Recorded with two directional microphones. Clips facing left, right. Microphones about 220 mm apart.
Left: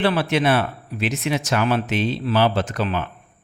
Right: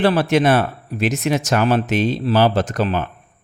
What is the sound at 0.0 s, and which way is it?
Speech, 45° right (ahead or behind).